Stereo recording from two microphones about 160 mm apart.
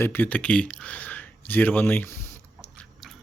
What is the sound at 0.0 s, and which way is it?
Speech, 10° left (ahead or behind).